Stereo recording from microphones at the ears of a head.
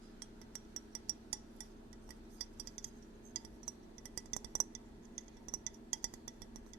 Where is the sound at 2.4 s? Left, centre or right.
Right.